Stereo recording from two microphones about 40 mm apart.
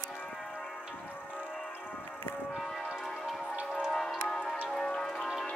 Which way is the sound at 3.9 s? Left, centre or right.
Centre.